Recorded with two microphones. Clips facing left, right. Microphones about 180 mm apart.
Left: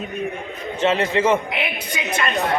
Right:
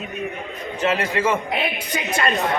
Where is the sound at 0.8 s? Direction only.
25° left (ahead or behind).